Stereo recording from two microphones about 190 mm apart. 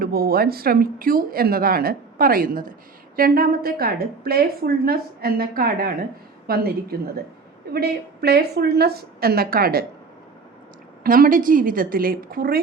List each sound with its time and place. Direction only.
0.0 s speech: 55° right (ahead or behind)
7.7 s a woman's voice: 55° right (ahead or behind)
11.0 s speech: 50° right (ahead or behind)